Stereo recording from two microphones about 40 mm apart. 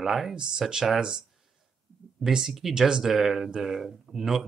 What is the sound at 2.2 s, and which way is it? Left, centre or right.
Speech, centre.